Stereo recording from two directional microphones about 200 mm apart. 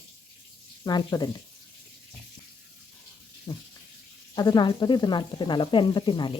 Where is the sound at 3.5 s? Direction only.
15° left (ahead or behind).